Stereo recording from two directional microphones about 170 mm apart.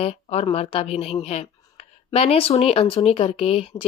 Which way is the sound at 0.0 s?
35° left (ahead or behind).